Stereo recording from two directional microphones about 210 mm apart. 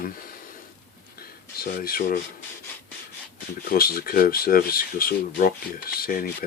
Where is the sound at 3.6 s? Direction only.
45° left (ahead or behind).